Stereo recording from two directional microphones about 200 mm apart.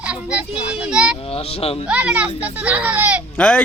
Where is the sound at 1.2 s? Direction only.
30° left (ahead or behind).